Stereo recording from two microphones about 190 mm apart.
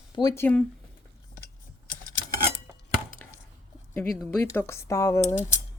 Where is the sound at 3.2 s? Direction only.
10° left (ahead or behind).